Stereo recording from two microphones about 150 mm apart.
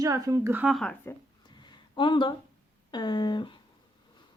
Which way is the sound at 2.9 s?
30° left (ahead or behind).